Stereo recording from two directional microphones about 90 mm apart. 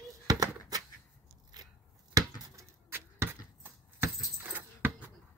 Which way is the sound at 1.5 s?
50° right (ahead or behind).